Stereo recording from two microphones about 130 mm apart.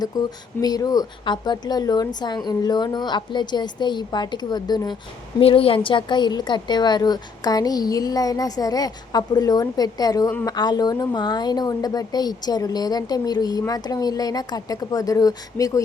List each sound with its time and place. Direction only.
0.1 s a woman's voice: 30° left (ahead or behind)
5.4 s a woman's voice: 45° left (ahead or behind); by 15.8 s 25° left (ahead or behind)